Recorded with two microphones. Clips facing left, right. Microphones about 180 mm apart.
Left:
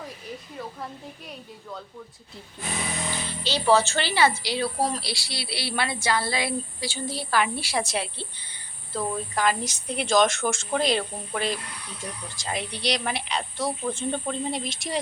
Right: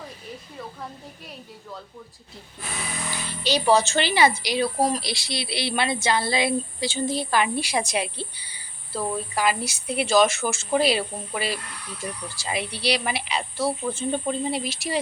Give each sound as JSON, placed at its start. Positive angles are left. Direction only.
{"t": 3.4, "sound": "a woman's voice", "side_deg": -15}